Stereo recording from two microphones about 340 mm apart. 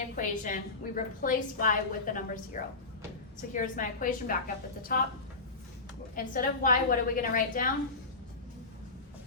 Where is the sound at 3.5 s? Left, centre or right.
Left.